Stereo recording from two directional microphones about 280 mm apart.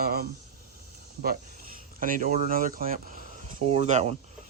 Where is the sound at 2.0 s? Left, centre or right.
Right.